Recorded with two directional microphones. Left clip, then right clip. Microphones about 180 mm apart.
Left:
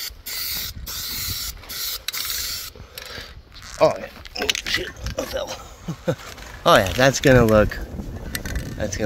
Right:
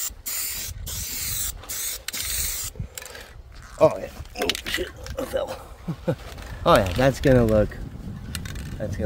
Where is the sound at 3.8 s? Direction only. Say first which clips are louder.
Left 1 dB; 25° right (ahead or behind).